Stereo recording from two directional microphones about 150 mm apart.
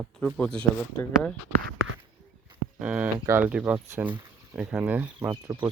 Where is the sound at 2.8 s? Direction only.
10° right (ahead or behind).